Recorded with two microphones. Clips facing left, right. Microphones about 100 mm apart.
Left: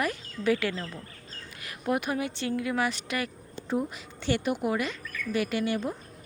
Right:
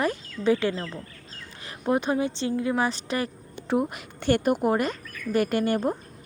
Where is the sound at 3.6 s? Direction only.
65° right (ahead or behind); by 6.0 s 45° right (ahead or behind).